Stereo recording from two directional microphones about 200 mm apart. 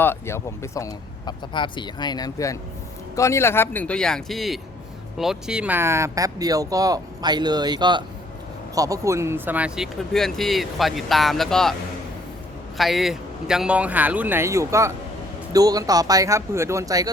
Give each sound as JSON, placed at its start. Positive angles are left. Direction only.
{"t": 0.0, "sound": "speech", "side_deg": 10}
{"t": 12.7, "sound": "speech", "side_deg": 0}